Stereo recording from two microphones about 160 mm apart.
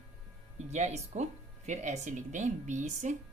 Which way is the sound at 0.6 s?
45° right (ahead or behind).